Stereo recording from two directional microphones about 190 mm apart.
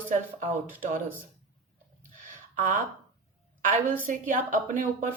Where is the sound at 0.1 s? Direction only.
45° right (ahead or behind).